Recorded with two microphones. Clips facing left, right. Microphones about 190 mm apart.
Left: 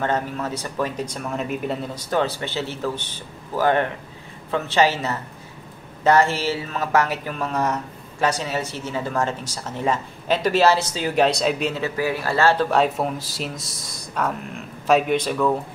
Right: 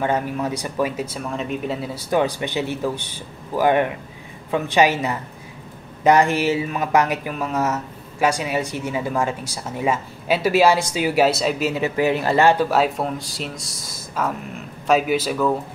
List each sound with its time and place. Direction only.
0.0 s speech: 10° right (ahead or behind)
11.7 s speech: 20° right (ahead or behind)
12.6 s speech: 5° right (ahead or behind)